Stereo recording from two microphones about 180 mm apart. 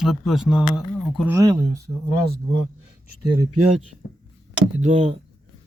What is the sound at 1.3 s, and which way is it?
Speech, 20° right (ahead or behind).